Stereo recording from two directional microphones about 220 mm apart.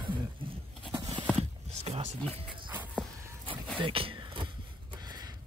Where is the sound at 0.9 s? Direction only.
20° right (ahead or behind).